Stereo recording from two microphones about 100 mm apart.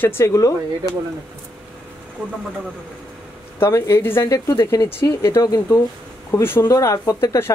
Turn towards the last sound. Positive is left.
turn(degrees=35)  # may be behind; listen again after turning